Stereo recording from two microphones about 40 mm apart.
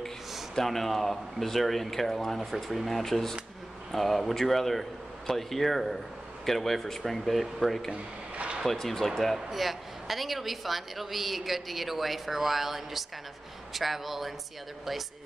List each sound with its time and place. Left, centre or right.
0.6 s a woman's voice: centre
7.9 s a sound: right
8.6 s a woman's voice: centre